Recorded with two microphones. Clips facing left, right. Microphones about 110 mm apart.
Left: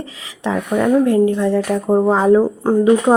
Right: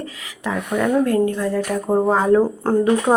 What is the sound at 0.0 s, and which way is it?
Speech, 20° left (ahead or behind).